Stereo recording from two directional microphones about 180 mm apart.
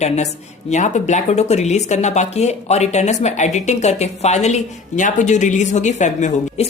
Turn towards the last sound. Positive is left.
turn(degrees=40)  # may be behind; listen again after turning